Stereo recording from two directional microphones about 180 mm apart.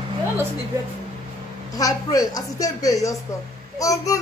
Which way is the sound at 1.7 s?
20° left (ahead or behind).